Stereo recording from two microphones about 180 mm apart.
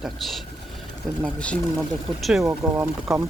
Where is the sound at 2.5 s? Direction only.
15° right (ahead or behind).